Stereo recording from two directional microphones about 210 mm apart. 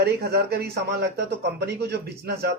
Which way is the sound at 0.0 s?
50° right (ahead or behind).